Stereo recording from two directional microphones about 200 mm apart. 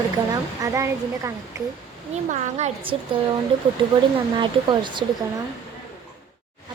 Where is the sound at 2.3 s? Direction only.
35° right (ahead or behind).